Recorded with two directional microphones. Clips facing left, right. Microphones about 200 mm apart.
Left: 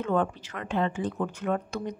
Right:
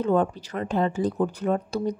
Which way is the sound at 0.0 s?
35° right (ahead or behind).